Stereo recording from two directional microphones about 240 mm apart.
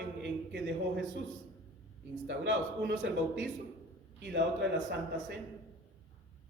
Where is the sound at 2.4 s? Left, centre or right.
Right.